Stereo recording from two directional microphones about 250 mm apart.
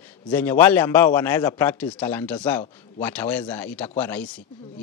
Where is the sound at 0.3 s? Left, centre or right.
Centre.